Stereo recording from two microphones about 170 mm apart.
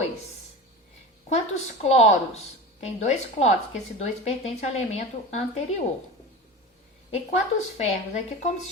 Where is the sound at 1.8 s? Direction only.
40° left (ahead or behind).